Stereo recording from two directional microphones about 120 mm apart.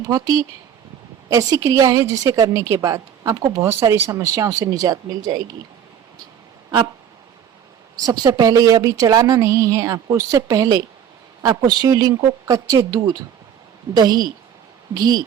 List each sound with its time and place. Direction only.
0.1 s a woman's voice: 30° right (ahead or behind)
8.0 s a woman's voice: 35° right (ahead or behind)